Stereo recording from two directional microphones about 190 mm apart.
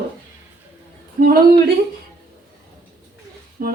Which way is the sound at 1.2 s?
50° right (ahead or behind).